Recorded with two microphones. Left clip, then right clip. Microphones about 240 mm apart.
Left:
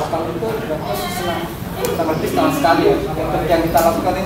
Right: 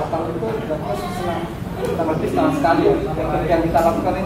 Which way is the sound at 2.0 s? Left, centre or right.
Centre.